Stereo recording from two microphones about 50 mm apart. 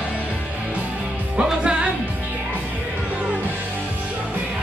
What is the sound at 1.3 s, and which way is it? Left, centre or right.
Music, right.